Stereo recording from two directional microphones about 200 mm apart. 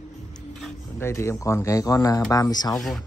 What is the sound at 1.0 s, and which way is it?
Speech, 10° left (ahead or behind).